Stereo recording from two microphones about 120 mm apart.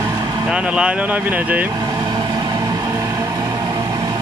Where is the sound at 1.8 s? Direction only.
40° right (ahead or behind).